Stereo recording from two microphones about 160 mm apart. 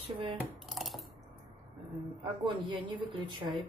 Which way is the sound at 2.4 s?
30° right (ahead or behind).